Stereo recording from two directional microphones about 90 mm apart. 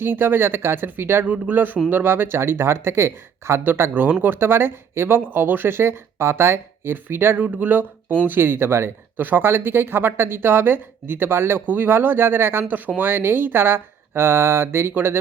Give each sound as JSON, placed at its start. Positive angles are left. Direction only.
{"t": 0.0, "sound": "speech", "side_deg": -25}